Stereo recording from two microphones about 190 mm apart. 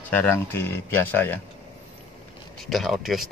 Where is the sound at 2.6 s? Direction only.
Centre (ahead or behind).